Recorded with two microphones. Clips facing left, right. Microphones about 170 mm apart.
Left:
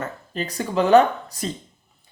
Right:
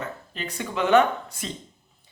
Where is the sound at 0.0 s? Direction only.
40° left (ahead or behind).